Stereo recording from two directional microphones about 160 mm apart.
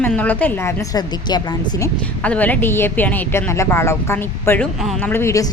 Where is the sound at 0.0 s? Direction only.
10° left (ahead or behind); by 1.9 s 25° left (ahead or behind).